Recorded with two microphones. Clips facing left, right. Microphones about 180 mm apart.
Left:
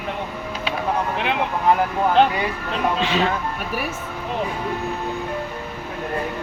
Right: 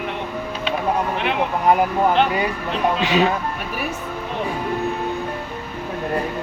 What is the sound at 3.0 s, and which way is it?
Speech, 15° right (ahead or behind).